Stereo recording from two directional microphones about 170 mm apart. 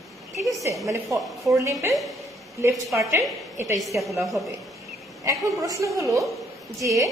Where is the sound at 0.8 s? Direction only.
20° right (ahead or behind).